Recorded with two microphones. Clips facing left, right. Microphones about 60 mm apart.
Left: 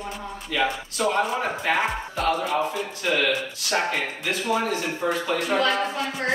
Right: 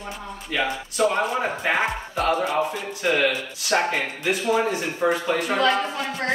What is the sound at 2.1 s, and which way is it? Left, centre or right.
Speech, centre.